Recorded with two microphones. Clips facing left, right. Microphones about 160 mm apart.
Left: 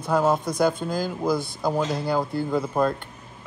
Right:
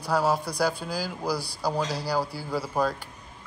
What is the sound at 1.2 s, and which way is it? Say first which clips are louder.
Speech: left 4 dB; 20° left (ahead or behind).